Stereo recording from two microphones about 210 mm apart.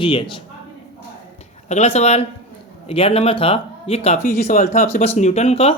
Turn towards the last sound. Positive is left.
turn(degrees=30)  # may be behind; listen again after turning